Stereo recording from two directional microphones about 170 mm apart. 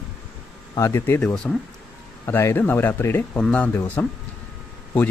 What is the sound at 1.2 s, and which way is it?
A man's voice, 5° left (ahead or behind).